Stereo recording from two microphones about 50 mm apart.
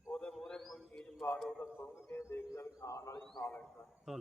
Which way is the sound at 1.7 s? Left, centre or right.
Left.